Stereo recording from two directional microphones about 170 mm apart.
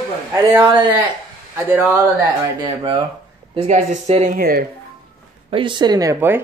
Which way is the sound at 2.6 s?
30° right (ahead or behind).